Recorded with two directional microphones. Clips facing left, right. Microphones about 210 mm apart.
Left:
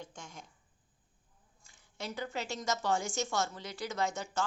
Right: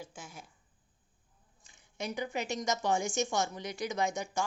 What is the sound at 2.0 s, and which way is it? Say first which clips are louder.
A woman's voice: right 3 dB; 15° right (ahead or behind).